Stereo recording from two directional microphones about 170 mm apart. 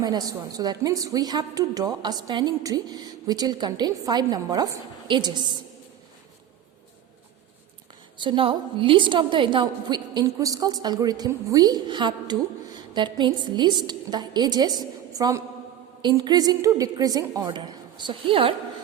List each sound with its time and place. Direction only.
0.0 s a woman's voice: 25° right (ahead or behind)
8.2 s a woman's voice: 30° right (ahead or behind)